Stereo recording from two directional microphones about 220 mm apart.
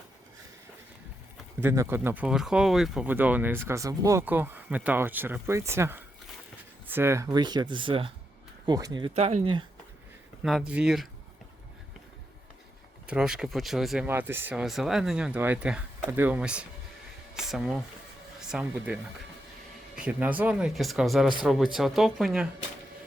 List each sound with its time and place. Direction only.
1.6 s speech: 10° right (ahead or behind)
10.7 s speech: 5° right (ahead or behind)
13.1 s speech: 5° right (ahead or behind)
20.0 s speech: 5° right (ahead or behind)